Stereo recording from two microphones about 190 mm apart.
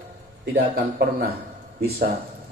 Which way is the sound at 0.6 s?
55° right (ahead or behind).